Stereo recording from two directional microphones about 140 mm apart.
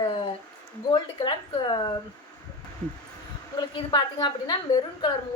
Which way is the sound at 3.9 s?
35° left (ahead or behind).